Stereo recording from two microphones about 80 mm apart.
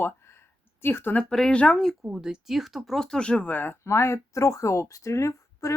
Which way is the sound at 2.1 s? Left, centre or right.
Centre.